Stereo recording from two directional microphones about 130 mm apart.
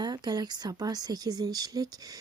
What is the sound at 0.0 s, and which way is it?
Speech, 30° right (ahead or behind).